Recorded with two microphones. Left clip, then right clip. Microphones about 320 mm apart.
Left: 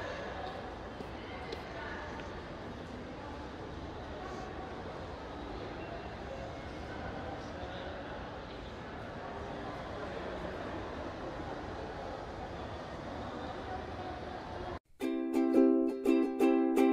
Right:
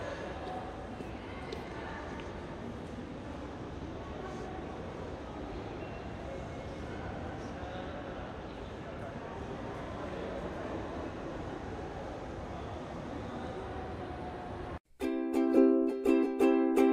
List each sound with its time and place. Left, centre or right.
15.0 s music: centre